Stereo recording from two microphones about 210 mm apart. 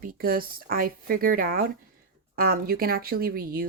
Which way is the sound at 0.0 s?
45° right (ahead or behind).